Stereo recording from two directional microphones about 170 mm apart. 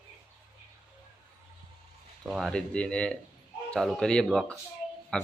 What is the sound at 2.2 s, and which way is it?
Speech, centre (ahead or behind).